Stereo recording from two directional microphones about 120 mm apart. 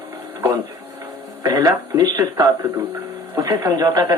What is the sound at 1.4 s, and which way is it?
Speech, 30° right (ahead or behind).